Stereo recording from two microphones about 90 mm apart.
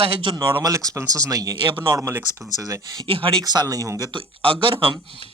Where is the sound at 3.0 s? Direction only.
80° right.